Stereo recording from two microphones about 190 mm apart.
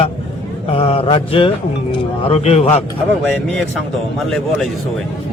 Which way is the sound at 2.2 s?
35° left (ahead or behind).